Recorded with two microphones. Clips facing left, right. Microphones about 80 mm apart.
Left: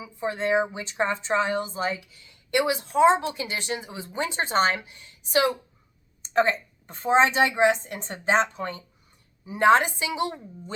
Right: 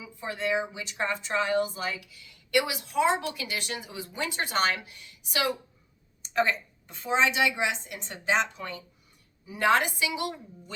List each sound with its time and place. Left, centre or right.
0.0 s a woman's voice: left